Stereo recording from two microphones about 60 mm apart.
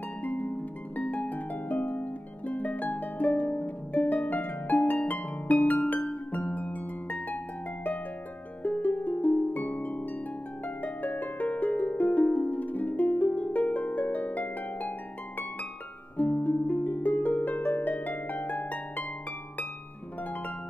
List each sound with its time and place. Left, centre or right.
0.2 s harp: left
8.6 s harp: left